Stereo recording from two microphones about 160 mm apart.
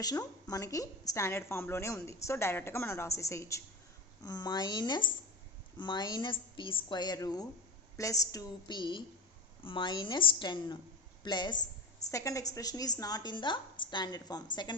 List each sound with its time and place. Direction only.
0.0 s a woman's voice: 25° left (ahead or behind)